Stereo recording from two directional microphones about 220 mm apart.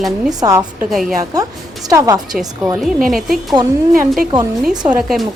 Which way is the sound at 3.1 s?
Centre (ahead or behind).